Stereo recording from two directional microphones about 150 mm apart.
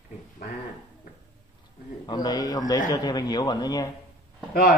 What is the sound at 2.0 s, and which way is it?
A man's voice, 25° left (ahead or behind).